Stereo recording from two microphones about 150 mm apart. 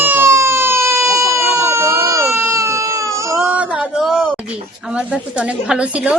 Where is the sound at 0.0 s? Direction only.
15° right (ahead or behind).